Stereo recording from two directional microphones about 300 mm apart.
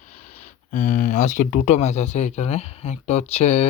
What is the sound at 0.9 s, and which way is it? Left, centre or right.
Speech, left.